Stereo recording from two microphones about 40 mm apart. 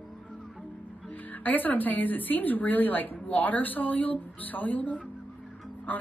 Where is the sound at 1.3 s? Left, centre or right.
Left.